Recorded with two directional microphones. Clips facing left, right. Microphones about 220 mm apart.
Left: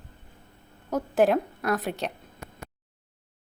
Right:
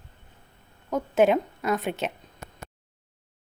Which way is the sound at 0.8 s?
Centre (ahead or behind).